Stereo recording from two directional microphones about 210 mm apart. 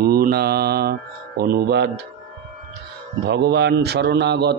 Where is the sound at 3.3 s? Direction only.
50° right (ahead or behind).